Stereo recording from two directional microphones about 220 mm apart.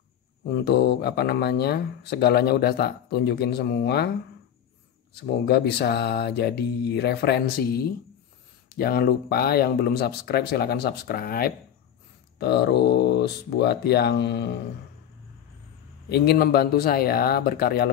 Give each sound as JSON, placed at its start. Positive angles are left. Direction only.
{"t": 0.5, "sound": "speech", "side_deg": 45}
{"t": 5.1, "sound": "speech", "side_deg": 45}
{"t": 16.1, "sound": "speech", "side_deg": 45}